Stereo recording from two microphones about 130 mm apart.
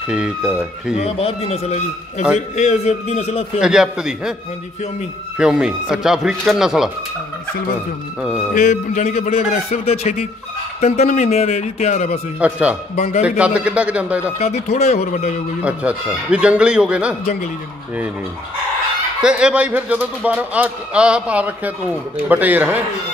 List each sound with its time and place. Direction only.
0.1 s speech: 5° right (ahead or behind)
1.0 s speech: 50° left (ahead or behind)
3.6 s speech: 5° right (ahead or behind)
5.4 s speech: 5° right (ahead or behind)
8.2 s a man's voice: 10° right (ahead or behind)
8.5 s speech: 70° left (ahead or behind)
12.4 s a man's voice: 10° right (ahead or behind)
12.9 s speech: 65° left (ahead or behind)
13.4 s a man's voice: 10° right (ahead or behind)
14.4 s speech: 55° left (ahead or behind)
15.6 s a man's voice: 10° right (ahead or behind)
19.2 s a man's voice: 10° right (ahead or behind)